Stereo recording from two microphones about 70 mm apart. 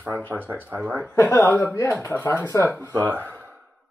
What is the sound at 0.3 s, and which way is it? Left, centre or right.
Speech, right.